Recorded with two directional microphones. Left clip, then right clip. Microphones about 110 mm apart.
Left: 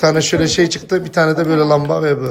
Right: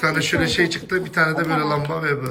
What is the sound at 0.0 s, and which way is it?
Speech, 40° left (ahead or behind).